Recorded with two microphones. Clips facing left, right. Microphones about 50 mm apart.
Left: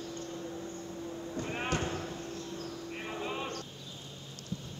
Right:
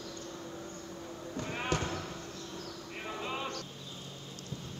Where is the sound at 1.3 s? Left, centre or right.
Left.